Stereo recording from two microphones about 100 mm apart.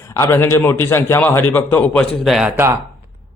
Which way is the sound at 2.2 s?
Centre (ahead or behind).